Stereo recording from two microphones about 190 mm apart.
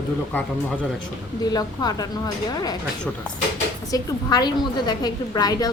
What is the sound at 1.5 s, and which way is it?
A woman's voice, 20° left (ahead or behind).